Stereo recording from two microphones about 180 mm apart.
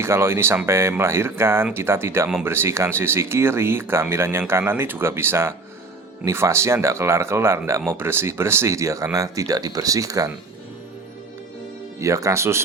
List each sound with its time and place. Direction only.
0.0 s speech: 15° right (ahead or behind)
11.9 s speech: 15° right (ahead or behind)